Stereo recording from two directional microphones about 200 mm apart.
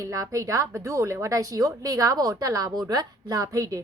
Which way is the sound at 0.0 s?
15° right (ahead or behind).